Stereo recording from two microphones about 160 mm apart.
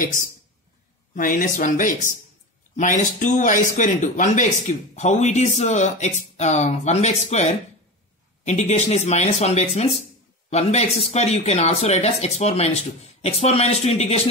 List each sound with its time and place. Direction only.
0.0 s speech: 55° left (ahead or behind)